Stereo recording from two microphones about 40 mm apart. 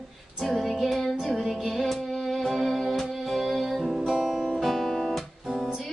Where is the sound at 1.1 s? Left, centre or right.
Right.